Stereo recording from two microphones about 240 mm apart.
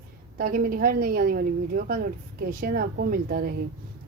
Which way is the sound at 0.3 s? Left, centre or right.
Right.